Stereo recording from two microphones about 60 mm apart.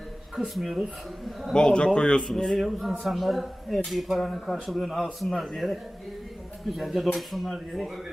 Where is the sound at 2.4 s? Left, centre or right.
Centre.